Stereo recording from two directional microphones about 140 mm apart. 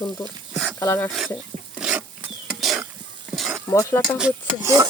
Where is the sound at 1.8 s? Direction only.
10° right (ahead or behind).